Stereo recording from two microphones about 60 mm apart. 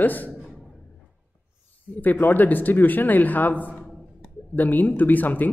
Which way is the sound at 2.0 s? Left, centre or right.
Left.